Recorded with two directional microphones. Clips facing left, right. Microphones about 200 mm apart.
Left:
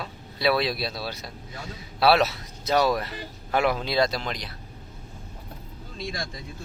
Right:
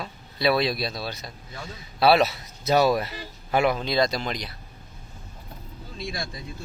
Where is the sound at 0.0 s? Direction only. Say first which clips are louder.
Right 1 dB; centre (ahead or behind).